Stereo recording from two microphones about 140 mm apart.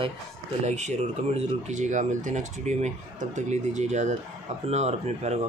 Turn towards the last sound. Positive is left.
turn(degrees=-50)  # may be behind; listen again after turning